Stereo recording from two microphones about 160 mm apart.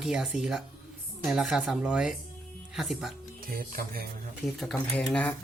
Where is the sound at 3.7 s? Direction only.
70° right (ahead or behind).